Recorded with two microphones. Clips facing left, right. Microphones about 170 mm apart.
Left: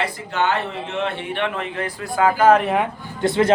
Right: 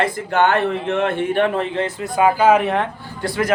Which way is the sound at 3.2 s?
25° left (ahead or behind).